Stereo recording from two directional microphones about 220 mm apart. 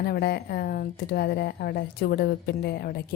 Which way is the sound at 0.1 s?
45° left (ahead or behind).